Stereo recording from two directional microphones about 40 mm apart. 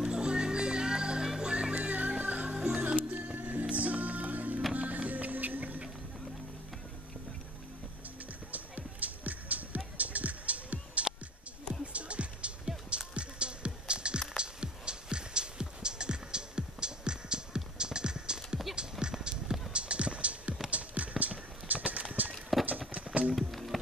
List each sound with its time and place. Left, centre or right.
0.0 s music: right
8.5 s music: right
17.7 s clip-clop: right
19.7 s music: right
20.7 s clip-clop: right
22.3 s clip-clop: centre
23.0 s music: right
23.3 s music: centre